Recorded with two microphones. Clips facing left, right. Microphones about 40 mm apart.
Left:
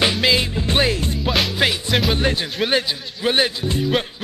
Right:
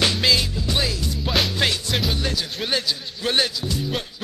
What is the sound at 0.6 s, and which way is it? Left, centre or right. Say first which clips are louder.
Music: left 5 dB; left.